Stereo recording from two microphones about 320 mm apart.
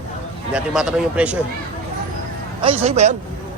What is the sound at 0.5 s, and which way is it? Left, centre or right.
Speech, centre.